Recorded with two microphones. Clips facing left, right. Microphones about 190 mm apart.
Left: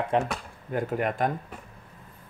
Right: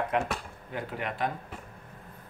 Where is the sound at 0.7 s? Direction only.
45° left (ahead or behind).